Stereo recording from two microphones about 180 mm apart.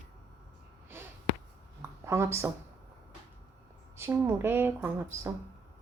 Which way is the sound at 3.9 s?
15° right (ahead or behind).